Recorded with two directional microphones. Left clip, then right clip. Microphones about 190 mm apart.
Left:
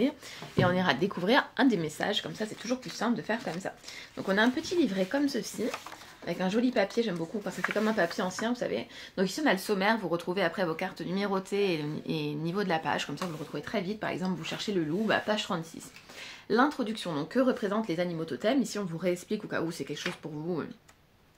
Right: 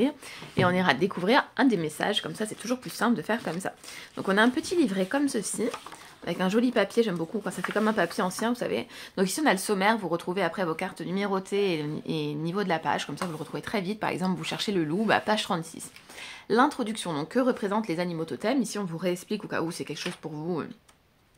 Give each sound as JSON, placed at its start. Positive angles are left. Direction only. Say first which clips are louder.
{"t": 0.6, "sound": "speech", "louder": "right 3 dB", "side_deg": -25}
{"t": 16.4, "sound": "speech", "louder": "right 3 dB", "side_deg": -30}